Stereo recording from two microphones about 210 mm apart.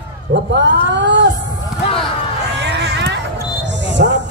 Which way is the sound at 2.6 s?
55° right (ahead or behind).